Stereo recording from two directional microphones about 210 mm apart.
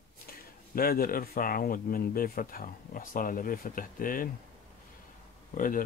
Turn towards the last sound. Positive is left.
turn(degrees=40)  # may be behind; listen again after turning